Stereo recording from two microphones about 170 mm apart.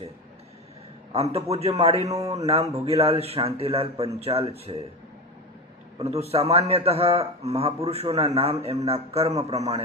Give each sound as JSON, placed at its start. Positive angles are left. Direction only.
{"t": 1.1, "sound": "a man's voice", "side_deg": -35}
{"t": 6.1, "sound": "a man's voice", "side_deg": -35}